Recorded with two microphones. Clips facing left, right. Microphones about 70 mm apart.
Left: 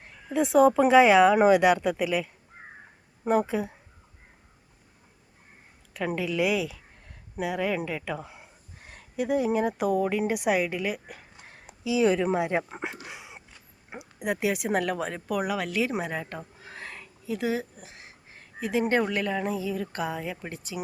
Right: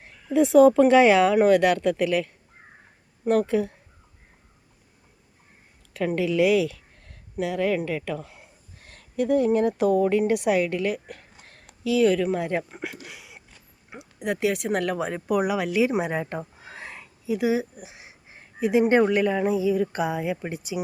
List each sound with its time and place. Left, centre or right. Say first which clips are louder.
0.0 s a woman's voice: right 5 dB; centre
6.1 s speech: right 6 dB; centre
12.7 s speech: even; left
14.2 s speech: right 3 dB; centre
14.9 s speech: right 5 dB; centre